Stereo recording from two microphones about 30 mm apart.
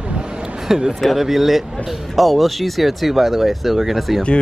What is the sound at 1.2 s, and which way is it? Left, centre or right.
Speech, centre.